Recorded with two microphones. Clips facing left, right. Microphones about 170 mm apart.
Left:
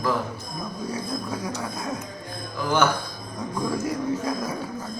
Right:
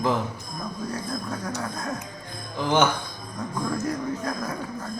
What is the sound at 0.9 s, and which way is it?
Speech, centre (ahead or behind).